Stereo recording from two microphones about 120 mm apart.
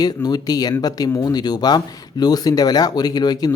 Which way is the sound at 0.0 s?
35° left (ahead or behind).